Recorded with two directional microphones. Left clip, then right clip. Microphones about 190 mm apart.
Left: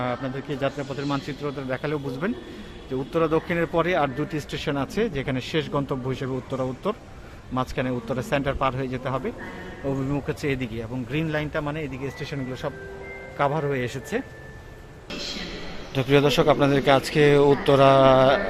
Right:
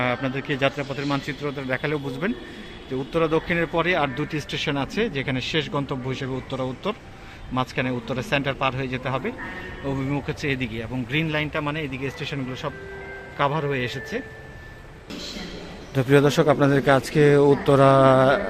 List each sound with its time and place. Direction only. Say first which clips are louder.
0.0 s speech: right 4 dB; 10° right (ahead or behind)
16.0 s a man's voice: right 1 dB; 25° right (ahead or behind)